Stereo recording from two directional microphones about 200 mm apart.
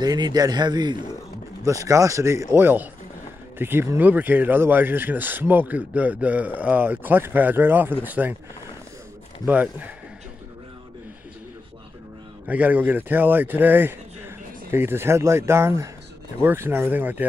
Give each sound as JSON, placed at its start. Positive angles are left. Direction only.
{"t": 0.0, "sound": "speech", "side_deg": -20}
{"t": 9.5, "sound": "speech", "side_deg": -10}
{"t": 12.4, "sound": "speech", "side_deg": -10}